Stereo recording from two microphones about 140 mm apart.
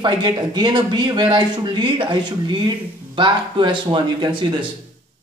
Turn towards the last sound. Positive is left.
turn(degrees=-35)  # may be behind; listen again after turning